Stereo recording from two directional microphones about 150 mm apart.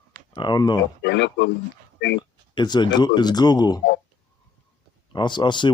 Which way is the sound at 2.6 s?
30° left (ahead or behind).